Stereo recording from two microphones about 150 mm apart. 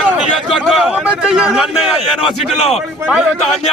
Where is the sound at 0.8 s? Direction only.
5° right (ahead or behind).